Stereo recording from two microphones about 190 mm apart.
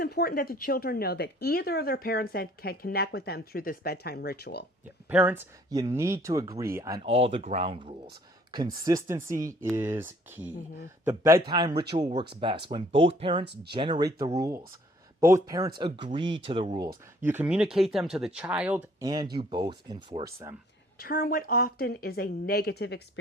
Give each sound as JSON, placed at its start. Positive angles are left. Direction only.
{"t": 0.0, "sound": "speech", "side_deg": 55}
{"t": 5.0, "sound": "speech", "side_deg": -10}
{"t": 7.1, "sound": "speech", "side_deg": -30}
{"t": 8.5, "sound": "speech", "side_deg": -20}
{"t": 17.2, "sound": "speech", "side_deg": -10}
{"t": 19.0, "sound": "speech", "side_deg": -20}
{"t": 21.0, "sound": "speech", "side_deg": 50}